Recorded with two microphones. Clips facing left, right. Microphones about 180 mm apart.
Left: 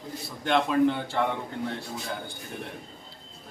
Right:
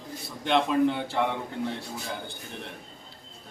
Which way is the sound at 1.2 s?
5° right (ahead or behind).